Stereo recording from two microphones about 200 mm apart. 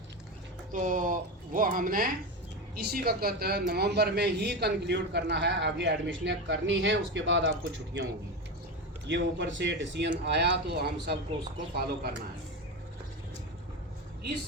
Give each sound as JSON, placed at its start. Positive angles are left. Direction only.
{"t": 0.7, "sound": "a man's voice", "side_deg": -40}
{"t": 9.0, "sound": "a man's voice", "side_deg": -60}